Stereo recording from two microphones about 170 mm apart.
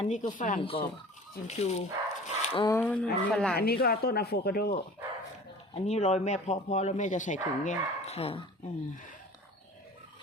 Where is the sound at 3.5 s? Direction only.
65° left (ahead or behind).